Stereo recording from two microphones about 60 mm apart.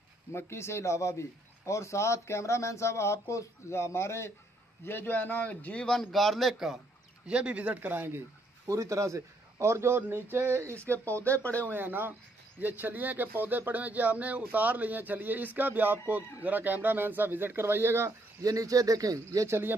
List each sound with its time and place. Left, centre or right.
0.3 s speech: left
4.8 s a man's voice: left
5.9 s a man's voice: centre
7.2 s speech: right
8.6 s a man's voice: right
11.6 s speech: right
18.0 s speech: right
19.4 s speech: right